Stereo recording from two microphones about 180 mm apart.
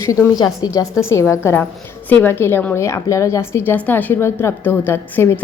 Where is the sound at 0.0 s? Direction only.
15° left (ahead or behind).